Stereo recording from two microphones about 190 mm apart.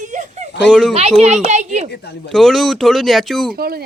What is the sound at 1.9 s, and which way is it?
Speech, 60° left (ahead or behind).